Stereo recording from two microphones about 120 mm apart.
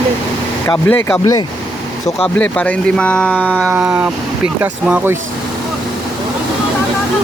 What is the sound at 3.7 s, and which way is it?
Speech, 15° right (ahead or behind).